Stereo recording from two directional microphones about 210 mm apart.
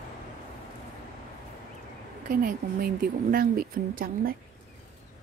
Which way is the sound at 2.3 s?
40° right (ahead or behind).